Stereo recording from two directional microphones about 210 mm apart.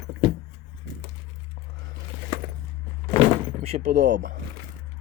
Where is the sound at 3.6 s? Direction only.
30° right (ahead or behind).